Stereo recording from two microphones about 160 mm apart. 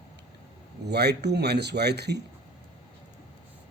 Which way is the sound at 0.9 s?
90° right.